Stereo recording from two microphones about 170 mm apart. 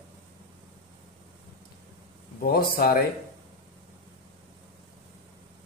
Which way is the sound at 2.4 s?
60° left (ahead or behind).